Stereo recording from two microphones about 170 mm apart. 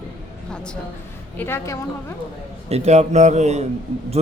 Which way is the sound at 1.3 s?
15° left (ahead or behind).